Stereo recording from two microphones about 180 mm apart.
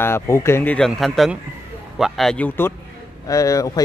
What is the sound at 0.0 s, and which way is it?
Speech, 15° left (ahead or behind).